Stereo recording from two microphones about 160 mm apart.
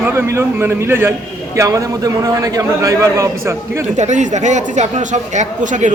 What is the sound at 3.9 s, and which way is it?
Speech, 50° right (ahead or behind).